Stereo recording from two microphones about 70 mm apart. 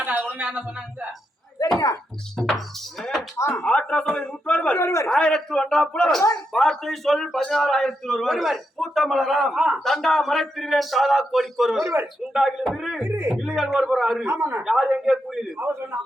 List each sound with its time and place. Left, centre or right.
0.3 s a sound: right
1.6 s a sound: left
3.0 s music: centre
3.3 s speech: left
3.6 s a man's voice: centre
4.8 s a man's voice: left
5.0 s a man's voice: centre
11.8 s a man's voice: right
12.3 s a man's voice: centre
13.0 s a man's voice: right
13.4 s a man's voice: centre
14.3 s a man's voice: right
14.6 s a man's voice: centre